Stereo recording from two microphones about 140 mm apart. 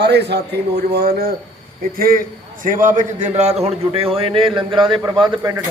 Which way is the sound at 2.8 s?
60° right (ahead or behind).